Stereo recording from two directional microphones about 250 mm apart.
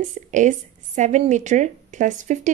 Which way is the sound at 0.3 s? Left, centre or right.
Right.